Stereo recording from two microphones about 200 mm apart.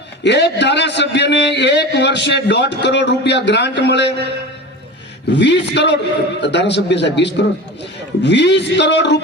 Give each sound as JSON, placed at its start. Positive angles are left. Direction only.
{"t": 0.2, "sound": "a man's voice", "side_deg": 60}
{"t": 5.3, "sound": "a man's voice", "side_deg": 60}